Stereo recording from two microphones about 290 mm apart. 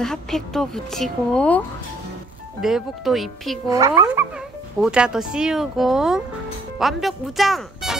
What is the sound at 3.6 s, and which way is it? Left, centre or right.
Speech, centre.